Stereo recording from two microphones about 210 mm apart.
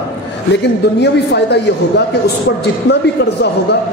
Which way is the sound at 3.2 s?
55° left (ahead or behind).